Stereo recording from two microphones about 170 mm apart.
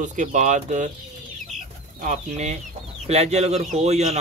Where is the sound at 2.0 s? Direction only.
45° right (ahead or behind).